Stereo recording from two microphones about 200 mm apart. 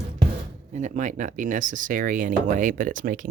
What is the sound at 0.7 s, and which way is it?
Speech, 35° right (ahead or behind).